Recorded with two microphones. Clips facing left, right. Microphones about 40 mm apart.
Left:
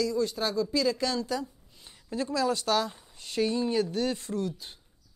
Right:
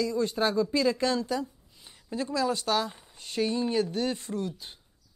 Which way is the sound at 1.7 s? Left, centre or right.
Centre.